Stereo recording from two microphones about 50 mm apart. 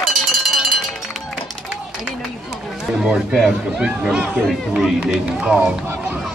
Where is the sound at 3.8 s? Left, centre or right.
Centre.